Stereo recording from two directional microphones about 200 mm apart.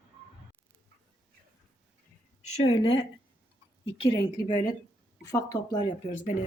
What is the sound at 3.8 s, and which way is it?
A woman's voice, 25° left (ahead or behind).